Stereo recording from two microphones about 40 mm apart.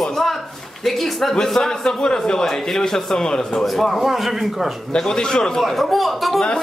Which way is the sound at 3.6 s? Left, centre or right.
Centre.